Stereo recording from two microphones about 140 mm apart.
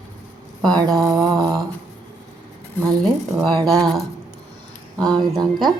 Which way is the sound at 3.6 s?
25° right (ahead or behind).